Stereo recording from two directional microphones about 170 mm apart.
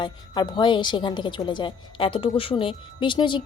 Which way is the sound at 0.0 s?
25° left (ahead or behind).